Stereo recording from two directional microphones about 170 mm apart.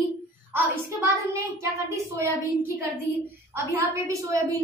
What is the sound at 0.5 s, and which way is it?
A woman's voice, 15° right (ahead or behind).